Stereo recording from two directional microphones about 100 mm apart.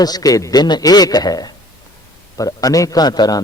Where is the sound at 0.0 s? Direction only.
40° left (ahead or behind).